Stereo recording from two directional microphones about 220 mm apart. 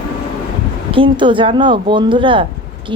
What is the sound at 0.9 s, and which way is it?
Speech, 25° right (ahead or behind).